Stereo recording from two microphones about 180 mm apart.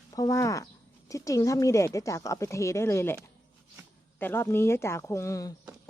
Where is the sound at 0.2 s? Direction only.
20° left (ahead or behind).